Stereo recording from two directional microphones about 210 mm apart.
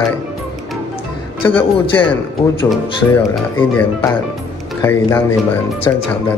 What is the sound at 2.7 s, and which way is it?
Speech, 10° left (ahead or behind).